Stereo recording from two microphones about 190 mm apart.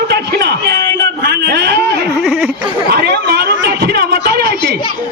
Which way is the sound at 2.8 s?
55° right (ahead or behind).